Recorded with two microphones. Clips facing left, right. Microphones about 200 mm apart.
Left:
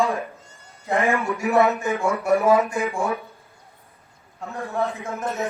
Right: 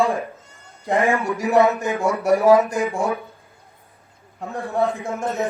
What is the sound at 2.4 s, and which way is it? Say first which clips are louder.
Speech: right 6 dB; 40° right (ahead or behind).